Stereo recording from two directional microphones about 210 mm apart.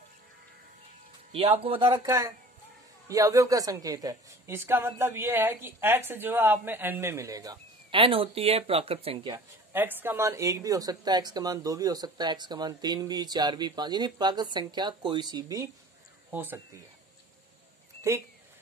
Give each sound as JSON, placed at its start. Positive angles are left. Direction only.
{"t": 1.6, "sound": "speech", "side_deg": -25}
{"t": 2.0, "sound": "a woman's voice", "side_deg": -15}
{"t": 9.7, "sound": "a woman's voice", "side_deg": -10}